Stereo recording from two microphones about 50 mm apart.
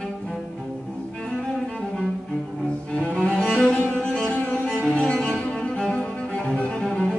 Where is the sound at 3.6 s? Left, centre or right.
Centre.